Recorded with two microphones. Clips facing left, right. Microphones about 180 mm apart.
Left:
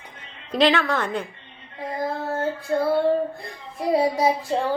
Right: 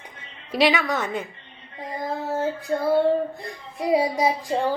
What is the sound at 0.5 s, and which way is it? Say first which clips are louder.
Speech: left 1 dB; 5° right (ahead or behind).